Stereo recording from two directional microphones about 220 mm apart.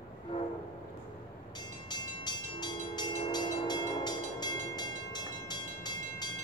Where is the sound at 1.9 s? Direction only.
20° left (ahead or behind).